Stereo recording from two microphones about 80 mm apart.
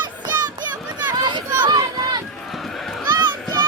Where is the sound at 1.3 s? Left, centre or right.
Right.